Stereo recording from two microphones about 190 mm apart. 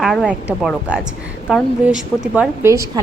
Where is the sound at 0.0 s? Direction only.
Centre (ahead or behind).